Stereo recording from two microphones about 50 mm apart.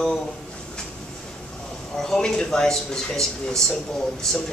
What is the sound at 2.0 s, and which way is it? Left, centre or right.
Speech, centre.